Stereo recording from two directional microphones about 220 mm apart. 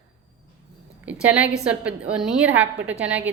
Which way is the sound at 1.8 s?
5° right (ahead or behind).